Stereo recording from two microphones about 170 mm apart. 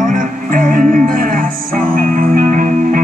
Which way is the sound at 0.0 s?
55° right (ahead or behind).